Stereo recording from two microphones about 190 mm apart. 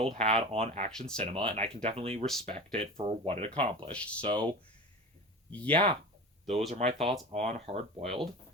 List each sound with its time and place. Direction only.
0.0 s speech: 30° right (ahead or behind)
0.9 s speech: 5° left (ahead or behind)
1.2 s speech: 30° right (ahead or behind)
3.9 s speech: 5° left (ahead or behind)
4.2 s speech: 25° right (ahead or behind)
5.6 s speech: 30° right (ahead or behind)